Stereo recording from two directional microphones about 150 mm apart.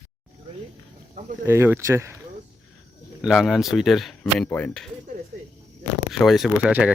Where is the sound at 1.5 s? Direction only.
15° right (ahead or behind).